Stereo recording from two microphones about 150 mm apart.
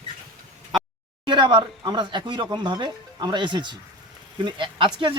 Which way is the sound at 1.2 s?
35° right (ahead or behind).